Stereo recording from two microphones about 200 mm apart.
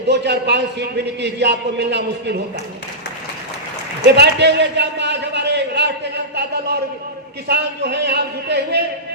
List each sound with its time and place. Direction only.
0.1 s a man's voice: 55° right (ahead or behind)
4.0 s a sound: 60° right (ahead or behind)
7.4 s a man's voice: 55° right (ahead or behind)